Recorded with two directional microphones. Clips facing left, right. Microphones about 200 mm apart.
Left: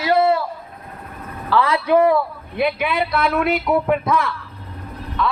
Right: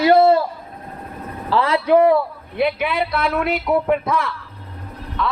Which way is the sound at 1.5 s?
30° right (ahead or behind).